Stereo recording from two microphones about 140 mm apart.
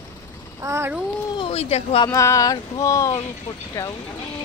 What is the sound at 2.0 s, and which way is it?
Speech, 20° left (ahead or behind).